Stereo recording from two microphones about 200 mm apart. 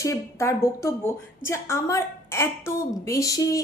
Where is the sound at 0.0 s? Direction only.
15° left (ahead or behind).